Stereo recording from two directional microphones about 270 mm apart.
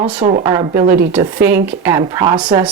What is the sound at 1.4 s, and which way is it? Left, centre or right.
Speech, right.